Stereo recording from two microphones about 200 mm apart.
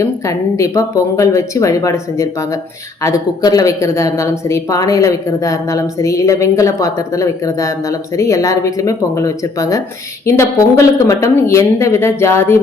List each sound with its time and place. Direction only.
0.0 s speech: 15° left (ahead or behind)